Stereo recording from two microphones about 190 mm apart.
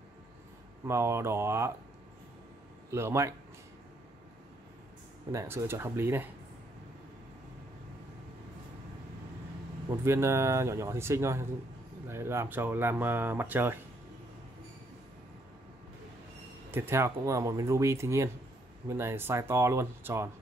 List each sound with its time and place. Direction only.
0.8 s speech: 15° right (ahead or behind)
2.9 s speech: 15° right (ahead or behind)
5.3 s speech: 15° right (ahead or behind)
10.0 s speech: 15° right (ahead or behind)
16.7 s speech: 10° right (ahead or behind)